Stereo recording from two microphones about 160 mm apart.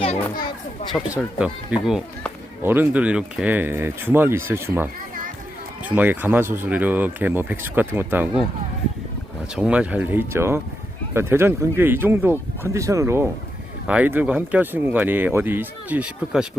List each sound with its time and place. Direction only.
0.9 s speech: 5° right (ahead or behind)
9.6 s speech: 10° right (ahead or behind)